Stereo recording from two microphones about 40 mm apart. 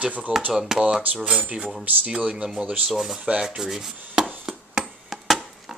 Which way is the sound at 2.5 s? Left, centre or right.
Centre.